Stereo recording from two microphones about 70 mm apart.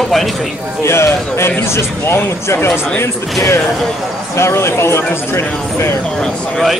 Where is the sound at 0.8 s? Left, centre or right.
Left.